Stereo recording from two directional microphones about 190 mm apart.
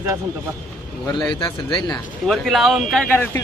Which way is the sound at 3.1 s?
10° left (ahead or behind).